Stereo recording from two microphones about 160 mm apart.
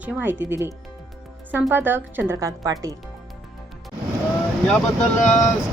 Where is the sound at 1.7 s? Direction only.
15° right (ahead or behind).